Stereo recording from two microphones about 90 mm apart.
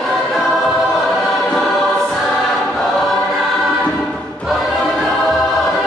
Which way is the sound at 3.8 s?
10° left (ahead or behind).